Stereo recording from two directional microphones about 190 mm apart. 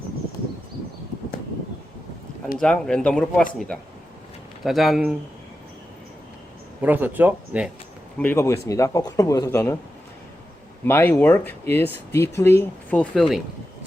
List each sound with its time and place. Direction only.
2.6 s speech: 5° left (ahead or behind)
4.6 s speech: centre (ahead or behind)
6.8 s speech: 10° right (ahead or behind)
8.2 s speech: 10° left (ahead or behind)
10.8 s speech: 10° left (ahead or behind)